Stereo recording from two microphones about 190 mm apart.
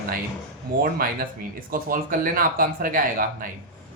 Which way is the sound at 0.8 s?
50° right (ahead or behind).